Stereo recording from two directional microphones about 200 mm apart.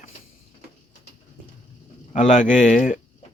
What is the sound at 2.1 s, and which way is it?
Speech, 40° left (ahead or behind).